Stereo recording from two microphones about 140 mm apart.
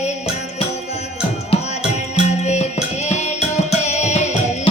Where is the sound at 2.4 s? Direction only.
50° left (ahead or behind).